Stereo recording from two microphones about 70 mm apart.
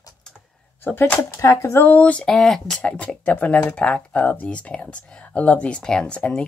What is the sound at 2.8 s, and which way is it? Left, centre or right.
Speech, centre.